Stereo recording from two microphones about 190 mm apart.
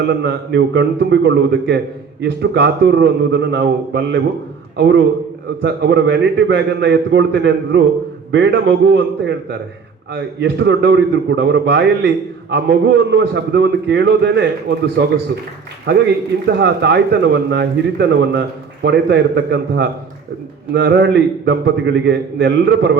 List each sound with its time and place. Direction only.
0.2 s a man's voice: 65° right (ahead or behind)